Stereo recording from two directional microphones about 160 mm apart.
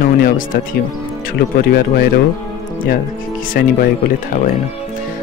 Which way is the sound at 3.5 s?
65° left (ahead or behind).